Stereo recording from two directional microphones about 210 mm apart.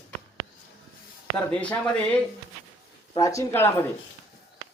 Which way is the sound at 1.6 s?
5° left (ahead or behind).